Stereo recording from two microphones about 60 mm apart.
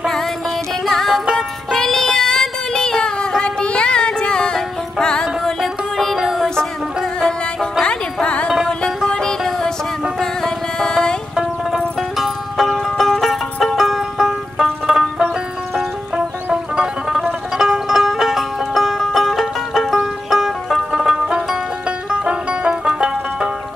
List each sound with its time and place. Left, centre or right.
0.8 s music: centre
7.8 s music: centre
12.2 s music: centre
22.1 s banjo: centre